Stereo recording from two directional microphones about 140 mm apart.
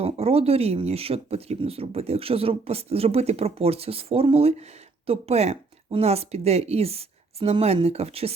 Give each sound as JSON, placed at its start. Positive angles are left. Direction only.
{"t": 0.0, "sound": "speech", "side_deg": -45}